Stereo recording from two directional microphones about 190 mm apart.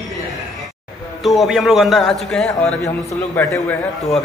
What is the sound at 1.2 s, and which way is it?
A man's voice, centre (ahead or behind).